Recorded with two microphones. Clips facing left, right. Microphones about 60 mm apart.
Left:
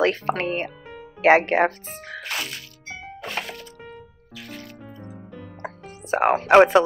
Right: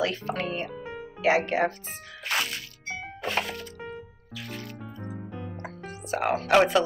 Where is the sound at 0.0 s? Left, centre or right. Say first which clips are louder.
Left 7 dB; left.